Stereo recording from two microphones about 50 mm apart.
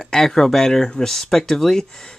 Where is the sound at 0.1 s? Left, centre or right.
Centre.